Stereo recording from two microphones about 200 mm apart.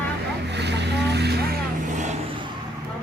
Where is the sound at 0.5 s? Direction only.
60° right (ahead or behind).